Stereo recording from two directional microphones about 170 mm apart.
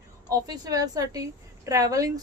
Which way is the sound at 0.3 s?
20° right (ahead or behind).